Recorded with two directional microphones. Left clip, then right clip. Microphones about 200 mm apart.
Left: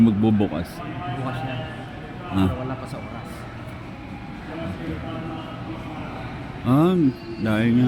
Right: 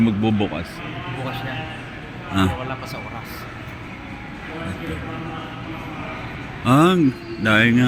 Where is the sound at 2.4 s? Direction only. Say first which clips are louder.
Right 3 dB; 10° left (ahead or behind).